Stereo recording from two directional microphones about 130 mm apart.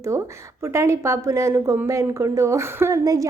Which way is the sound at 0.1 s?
20° right (ahead or behind).